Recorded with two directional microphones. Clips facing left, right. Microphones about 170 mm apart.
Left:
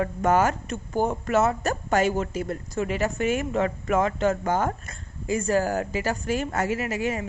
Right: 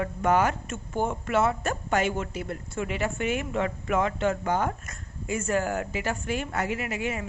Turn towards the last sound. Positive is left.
turn(degrees=40)  # may be behind; listen again after turning